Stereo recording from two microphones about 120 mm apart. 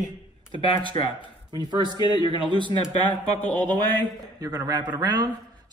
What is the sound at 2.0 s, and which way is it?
Speech, 35° left (ahead or behind).